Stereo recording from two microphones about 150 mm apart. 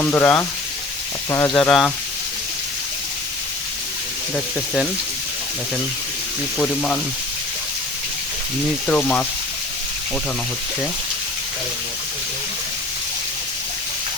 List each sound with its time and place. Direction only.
0.0 s speech: 15° left (ahead or behind)
1.5 s speech: 5° left (ahead or behind)
4.4 s speech: 5° left (ahead or behind)
6.6 s speech: 10° left (ahead or behind)
8.9 s speech: 10° left (ahead or behind)